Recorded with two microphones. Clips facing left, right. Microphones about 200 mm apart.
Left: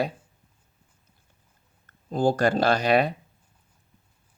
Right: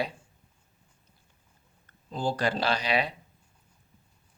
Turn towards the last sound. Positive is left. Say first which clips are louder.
# left 7 dB
turn(degrees=50)  # may be behind; listen again after turning